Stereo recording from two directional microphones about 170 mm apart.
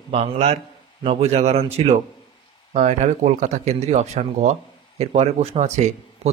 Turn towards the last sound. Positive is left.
turn(degrees=-40)  # may be behind; listen again after turning